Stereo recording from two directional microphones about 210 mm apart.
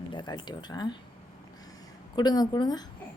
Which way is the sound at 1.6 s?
20° left (ahead or behind).